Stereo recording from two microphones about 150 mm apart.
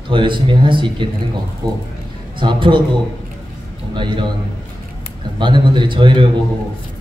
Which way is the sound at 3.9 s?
30° right (ahead or behind).